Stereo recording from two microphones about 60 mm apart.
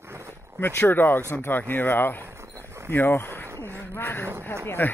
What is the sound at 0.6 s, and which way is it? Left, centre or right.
Speech, left.